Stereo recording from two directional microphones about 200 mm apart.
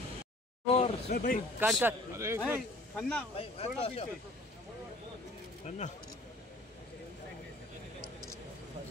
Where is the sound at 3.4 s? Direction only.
30° left (ahead or behind).